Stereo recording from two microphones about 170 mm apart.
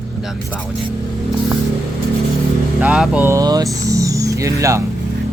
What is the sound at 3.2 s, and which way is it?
Speech, 20° right (ahead or behind).